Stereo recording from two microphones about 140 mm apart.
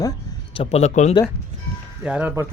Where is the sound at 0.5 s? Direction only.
45° left (ahead or behind).